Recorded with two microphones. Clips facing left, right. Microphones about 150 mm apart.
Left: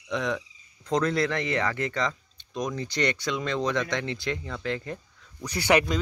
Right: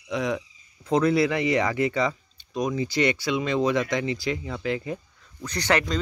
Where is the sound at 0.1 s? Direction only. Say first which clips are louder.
Right 2 dB; 5° right (ahead or behind).